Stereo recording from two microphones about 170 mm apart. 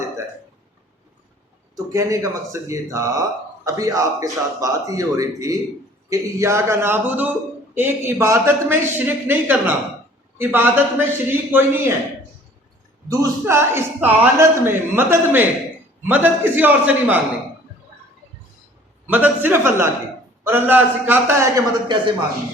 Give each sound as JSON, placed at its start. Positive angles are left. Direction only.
{"t": 1.7, "sound": "a man's voice", "side_deg": -20}
{"t": 13.1, "sound": "a man's voice", "side_deg": -15}
{"t": 19.0, "sound": "a man's voice", "side_deg": -10}